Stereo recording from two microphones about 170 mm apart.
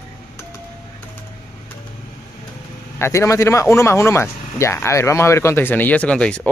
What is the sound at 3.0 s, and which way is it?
Speech, 20° left (ahead or behind).